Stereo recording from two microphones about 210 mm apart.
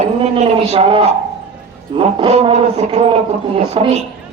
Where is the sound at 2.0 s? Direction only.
25° right (ahead or behind).